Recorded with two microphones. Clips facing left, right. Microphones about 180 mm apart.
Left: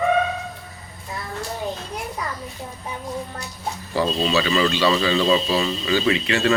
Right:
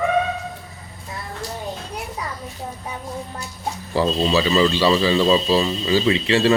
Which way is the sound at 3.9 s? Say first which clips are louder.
Right 2 dB; 35° right (ahead or behind).